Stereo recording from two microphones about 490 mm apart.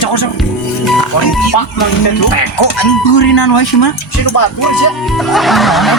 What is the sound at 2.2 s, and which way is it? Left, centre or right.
Speech, left.